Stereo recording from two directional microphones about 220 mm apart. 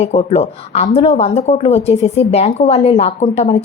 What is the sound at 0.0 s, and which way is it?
A woman's voice, 30° left (ahead or behind).